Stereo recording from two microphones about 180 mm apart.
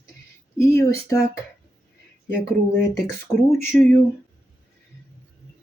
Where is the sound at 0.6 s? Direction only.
15° left (ahead or behind).